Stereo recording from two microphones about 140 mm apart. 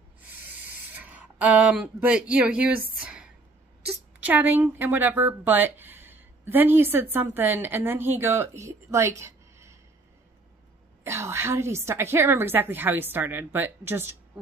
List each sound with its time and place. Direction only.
0.9 s speech: 10° right (ahead or behind)
3.0 s a sound: 5° right (ahead or behind)
4.2 s speech: 15° right (ahead or behind)
11.1 s a woman's voice: 20° right (ahead or behind)